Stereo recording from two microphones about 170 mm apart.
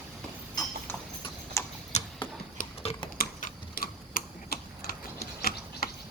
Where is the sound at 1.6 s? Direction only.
15° left (ahead or behind).